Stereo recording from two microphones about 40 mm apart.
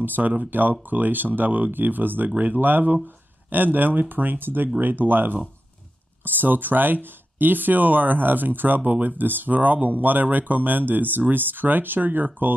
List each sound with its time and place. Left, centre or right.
0.0 s speech: right